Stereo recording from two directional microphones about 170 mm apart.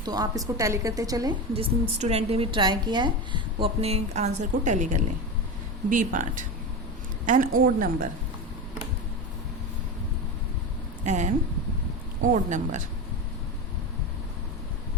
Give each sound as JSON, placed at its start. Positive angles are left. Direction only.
{"t": 0.0, "sound": "a woman's voice", "side_deg": -25}
{"t": 1.5, "sound": "a woman's voice", "side_deg": -35}
{"t": 11.0, "sound": "speech", "side_deg": -45}